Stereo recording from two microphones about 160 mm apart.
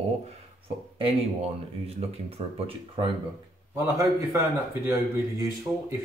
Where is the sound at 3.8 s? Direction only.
15° right (ahead or behind).